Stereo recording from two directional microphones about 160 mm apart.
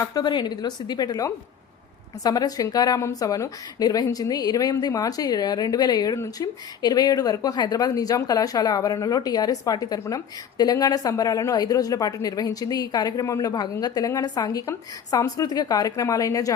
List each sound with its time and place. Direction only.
0.0 s speech: 25° left (ahead or behind)